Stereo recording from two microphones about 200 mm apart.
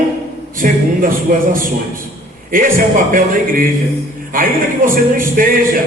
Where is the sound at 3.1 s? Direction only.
45° right (ahead or behind).